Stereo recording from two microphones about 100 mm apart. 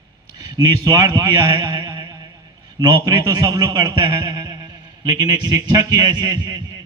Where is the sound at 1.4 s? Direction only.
40° right (ahead or behind).